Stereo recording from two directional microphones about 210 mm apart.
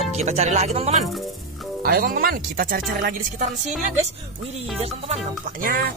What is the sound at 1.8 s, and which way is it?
Speech, 45° right (ahead or behind).